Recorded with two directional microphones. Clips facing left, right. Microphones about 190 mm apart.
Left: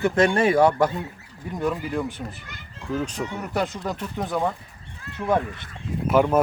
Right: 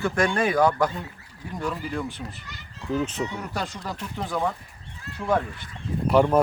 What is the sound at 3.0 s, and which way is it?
Speech, 5° right (ahead or behind).